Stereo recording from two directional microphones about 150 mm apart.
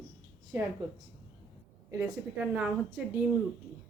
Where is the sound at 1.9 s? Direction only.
20° right (ahead or behind).